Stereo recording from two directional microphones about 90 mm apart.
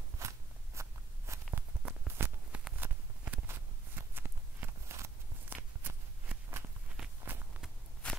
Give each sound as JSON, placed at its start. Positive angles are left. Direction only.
{"t": 0.2, "sound": "a sound", "side_deg": -35}
{"t": 2.8, "sound": "walk", "side_deg": -25}
{"t": 8.0, "sound": "walk", "side_deg": 10}